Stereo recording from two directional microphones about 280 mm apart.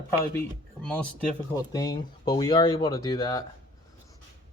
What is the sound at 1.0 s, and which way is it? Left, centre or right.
Speech, centre.